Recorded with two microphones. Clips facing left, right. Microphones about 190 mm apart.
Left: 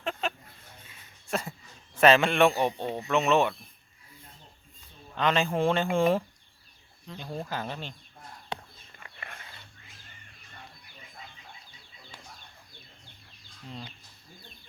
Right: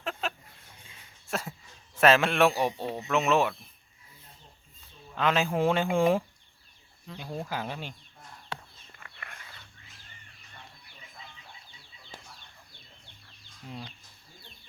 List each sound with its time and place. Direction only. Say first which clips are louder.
0.0 s chicken: left 2 dB; centre (ahead or behind)
1.3 s a sound: left 2 dB; centre (ahead or behind)
2.0 s a man's voice: left 1 dB; centre (ahead or behind)
5.1 s speech: even; 5° right (ahead or behind)
8.5 s a sound: left 2 dB; 20° left (ahead or behind)
9.0 s dog: left 3 dB; 25° left (ahead or behind)
12.1 s chicken: right 3 dB; 40° right (ahead or behind)